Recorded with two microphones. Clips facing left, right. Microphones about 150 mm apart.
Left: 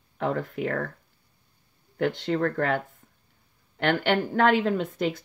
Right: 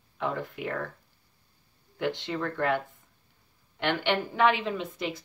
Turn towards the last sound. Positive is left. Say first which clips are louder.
# left 6 dB
turn(degrees=55)  # may be behind; listen again after turning